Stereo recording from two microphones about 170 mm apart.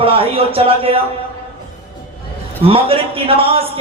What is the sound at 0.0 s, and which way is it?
Speech, 35° right (ahead or behind).